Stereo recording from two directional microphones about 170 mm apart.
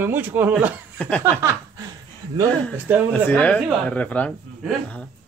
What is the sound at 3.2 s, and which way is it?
Speech, 10° left (ahead or behind).